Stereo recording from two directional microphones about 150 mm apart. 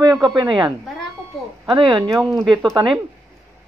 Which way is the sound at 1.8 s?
30° right (ahead or behind).